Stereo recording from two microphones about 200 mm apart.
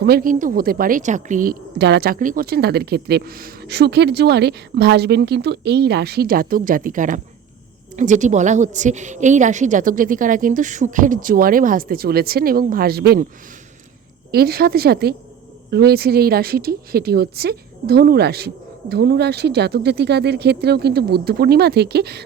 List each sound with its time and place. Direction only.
0.0 s a woman's voice: 50° right (ahead or behind)
14.3 s speech: 50° right (ahead or behind)